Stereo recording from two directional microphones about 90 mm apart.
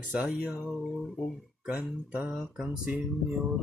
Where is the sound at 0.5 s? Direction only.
Centre (ahead or behind).